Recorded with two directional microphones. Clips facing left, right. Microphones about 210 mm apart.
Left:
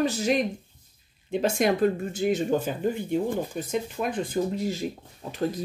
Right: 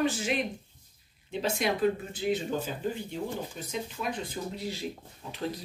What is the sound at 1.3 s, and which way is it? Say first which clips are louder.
Speech: left 6 dB; 50° left (ahead or behind).